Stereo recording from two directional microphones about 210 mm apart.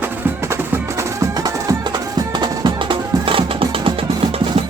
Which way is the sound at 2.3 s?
20° right (ahead or behind).